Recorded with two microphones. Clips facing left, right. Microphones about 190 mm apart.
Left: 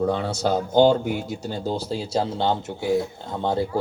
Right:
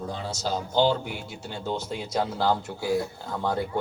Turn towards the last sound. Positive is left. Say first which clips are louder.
# left 4 dB
turn(degrees=25)  # may be behind; listen again after turning